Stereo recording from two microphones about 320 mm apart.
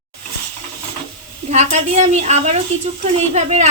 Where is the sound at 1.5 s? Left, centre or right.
Right.